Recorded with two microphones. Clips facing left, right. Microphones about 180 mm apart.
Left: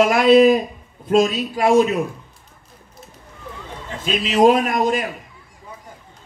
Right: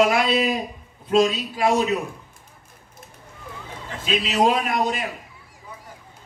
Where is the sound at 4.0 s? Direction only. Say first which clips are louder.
Left 5 dB; 50° left (ahead or behind).